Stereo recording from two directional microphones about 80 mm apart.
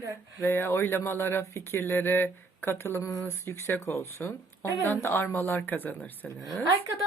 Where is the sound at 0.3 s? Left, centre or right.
Left.